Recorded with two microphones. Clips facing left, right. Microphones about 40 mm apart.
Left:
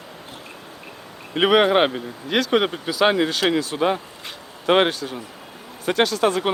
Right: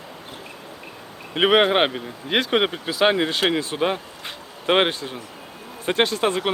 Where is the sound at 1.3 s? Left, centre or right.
Centre.